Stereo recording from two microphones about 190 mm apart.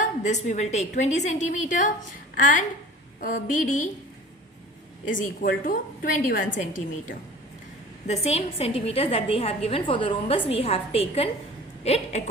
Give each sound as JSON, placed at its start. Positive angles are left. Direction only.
{"t": 0.0, "sound": "a woman's voice", "side_deg": 40}
{"t": 5.0, "sound": "a woman's voice", "side_deg": 45}